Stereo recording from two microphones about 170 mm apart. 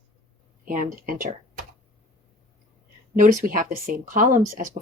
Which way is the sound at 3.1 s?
50° right (ahead or behind).